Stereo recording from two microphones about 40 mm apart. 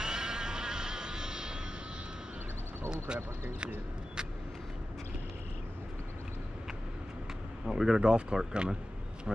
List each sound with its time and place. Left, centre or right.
0.0 s vehicle: centre
7.6 s speech: centre
8.0 s speech: right